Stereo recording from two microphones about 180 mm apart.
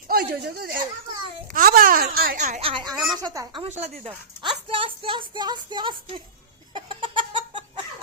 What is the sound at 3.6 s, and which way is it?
Speech, 35° right (ahead or behind).